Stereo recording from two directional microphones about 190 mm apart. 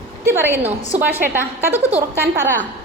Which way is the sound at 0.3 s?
10° right (ahead or behind).